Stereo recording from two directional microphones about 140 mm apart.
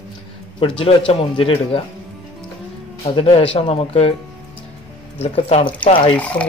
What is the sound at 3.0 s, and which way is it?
A man's voice, 40° left (ahead or behind).